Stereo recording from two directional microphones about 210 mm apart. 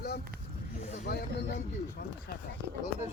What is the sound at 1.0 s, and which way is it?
Speech, 50° left (ahead or behind).